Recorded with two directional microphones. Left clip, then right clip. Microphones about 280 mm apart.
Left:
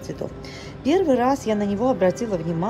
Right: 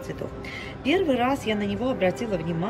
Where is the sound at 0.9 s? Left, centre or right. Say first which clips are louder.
Left 4 dB; centre.